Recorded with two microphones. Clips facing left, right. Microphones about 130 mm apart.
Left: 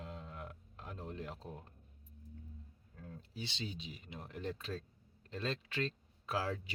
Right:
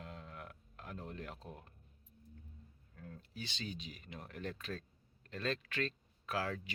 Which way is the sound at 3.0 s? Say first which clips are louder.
Left 1 dB; 30° left (ahead or behind).